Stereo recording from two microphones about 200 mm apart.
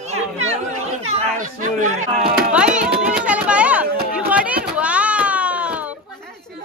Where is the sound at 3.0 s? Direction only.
5° right (ahead or behind).